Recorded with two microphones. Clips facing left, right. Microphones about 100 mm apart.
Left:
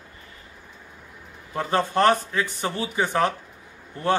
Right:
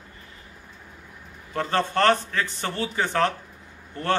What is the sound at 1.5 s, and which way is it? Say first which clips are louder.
A man's voice: left 1 dB; 15° left (ahead or behind).